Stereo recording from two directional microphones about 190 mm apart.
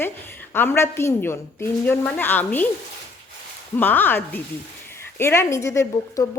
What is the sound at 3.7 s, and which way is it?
A woman's voice, 10° left (ahead or behind).